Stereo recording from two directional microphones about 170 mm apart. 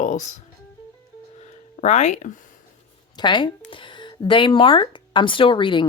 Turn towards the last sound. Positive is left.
turn(degrees=30)  # may be behind; listen again after turning